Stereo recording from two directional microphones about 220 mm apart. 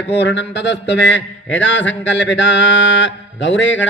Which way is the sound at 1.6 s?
55° left (ahead or behind).